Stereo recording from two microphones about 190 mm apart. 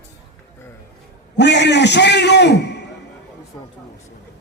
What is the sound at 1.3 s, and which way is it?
A man's voice, 65° left (ahead or behind).